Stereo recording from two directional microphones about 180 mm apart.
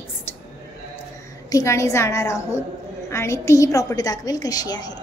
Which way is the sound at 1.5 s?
15° left (ahead or behind).